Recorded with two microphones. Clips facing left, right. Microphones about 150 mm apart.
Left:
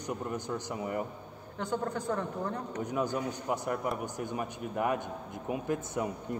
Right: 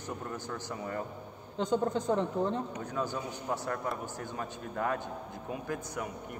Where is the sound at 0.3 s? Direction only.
15° left (ahead or behind).